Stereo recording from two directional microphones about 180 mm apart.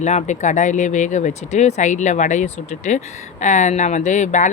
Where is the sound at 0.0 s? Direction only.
40° left (ahead or behind).